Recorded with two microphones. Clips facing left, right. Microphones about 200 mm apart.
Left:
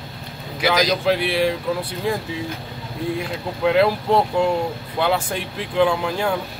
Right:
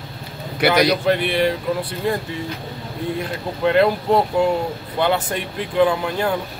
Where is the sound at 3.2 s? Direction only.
Centre (ahead or behind).